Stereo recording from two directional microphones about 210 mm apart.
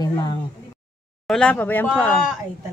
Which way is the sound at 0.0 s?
20° left (ahead or behind).